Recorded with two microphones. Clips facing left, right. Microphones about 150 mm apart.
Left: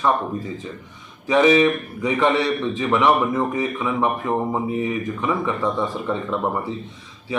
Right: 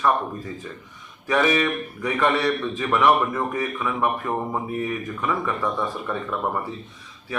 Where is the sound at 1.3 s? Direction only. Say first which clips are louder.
Left 6 dB; 20° left (ahead or behind).